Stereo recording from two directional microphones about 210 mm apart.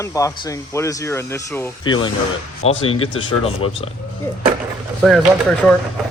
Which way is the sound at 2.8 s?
25° left (ahead or behind).